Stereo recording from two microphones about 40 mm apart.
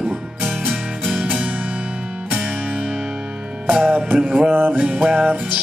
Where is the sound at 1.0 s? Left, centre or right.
Right.